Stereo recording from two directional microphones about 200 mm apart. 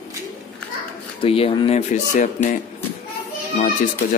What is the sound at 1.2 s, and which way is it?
Speech, 30° left (ahead or behind).